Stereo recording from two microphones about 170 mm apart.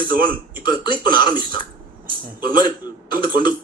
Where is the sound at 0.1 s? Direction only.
55° right (ahead or behind).